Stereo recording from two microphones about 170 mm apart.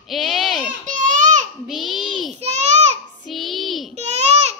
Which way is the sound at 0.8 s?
50° right (ahead or behind).